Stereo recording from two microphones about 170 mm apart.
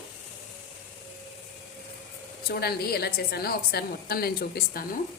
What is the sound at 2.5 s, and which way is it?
A woman's voice, 65° left (ahead or behind).